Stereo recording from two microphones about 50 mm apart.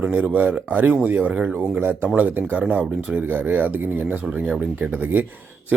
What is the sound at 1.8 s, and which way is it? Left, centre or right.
Speech, right.